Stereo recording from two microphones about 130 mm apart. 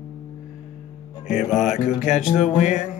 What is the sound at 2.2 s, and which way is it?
Music, 65° left (ahead or behind).